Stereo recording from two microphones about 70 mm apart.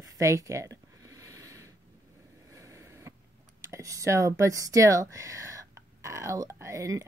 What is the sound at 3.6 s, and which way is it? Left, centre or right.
Speech, right.